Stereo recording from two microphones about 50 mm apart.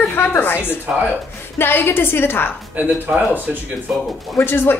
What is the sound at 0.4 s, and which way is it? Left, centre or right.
A woman's voice, left.